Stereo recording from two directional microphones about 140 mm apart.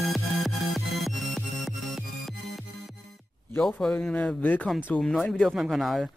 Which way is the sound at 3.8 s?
5° left (ahead or behind).